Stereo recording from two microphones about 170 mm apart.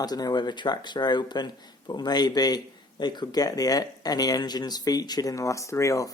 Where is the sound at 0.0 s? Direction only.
25° left (ahead or behind).